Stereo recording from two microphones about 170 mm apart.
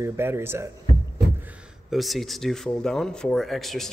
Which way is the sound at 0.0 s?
15° right (ahead or behind).